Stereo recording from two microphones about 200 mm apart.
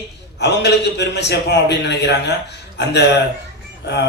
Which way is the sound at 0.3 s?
60° left (ahead or behind).